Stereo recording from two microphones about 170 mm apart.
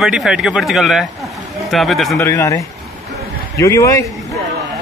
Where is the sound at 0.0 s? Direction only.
5° right (ahead or behind).